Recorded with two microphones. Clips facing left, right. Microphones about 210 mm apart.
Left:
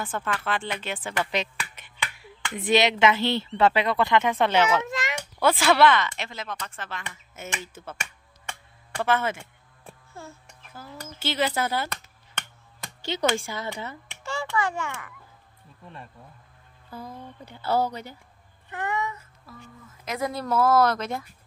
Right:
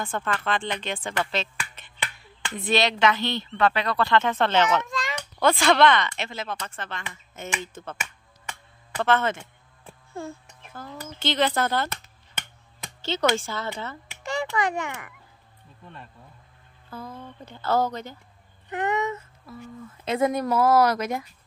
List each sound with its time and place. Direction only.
0.0 s speech: 5° left (ahead or behind)
1.8 s finger snapping: 10° left (ahead or behind)
3.4 s speech: 25° left (ahead or behind); by 8.0 s 5° left (ahead or behind)
9.0 s speech: 10° left (ahead or behind)
10.7 s speech: 5° left (ahead or behind)
13.0 s speech: 15° left (ahead or behind)
14.2 s a child's voice: 15° right (ahead or behind)
16.9 s speech: 15° left (ahead or behind)
18.7 s speech: 20° right (ahead or behind)
20.4 s a woman's voice: 10° right (ahead or behind)